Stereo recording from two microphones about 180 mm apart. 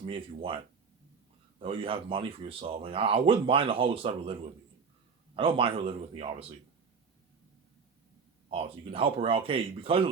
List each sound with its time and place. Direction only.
0.0 s speech: 30° right (ahead or behind)
5.4 s speech: 30° right (ahead or behind)
8.4 s speech: 30° right (ahead or behind)